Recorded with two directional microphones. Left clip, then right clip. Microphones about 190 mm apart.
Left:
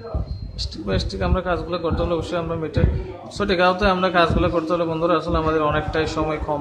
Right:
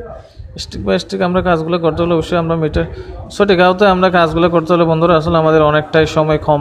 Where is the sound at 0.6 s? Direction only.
40° right (ahead or behind).